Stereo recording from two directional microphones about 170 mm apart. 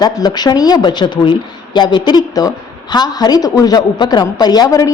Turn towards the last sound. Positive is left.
turn(degrees=20)  # may be behind; listen again after turning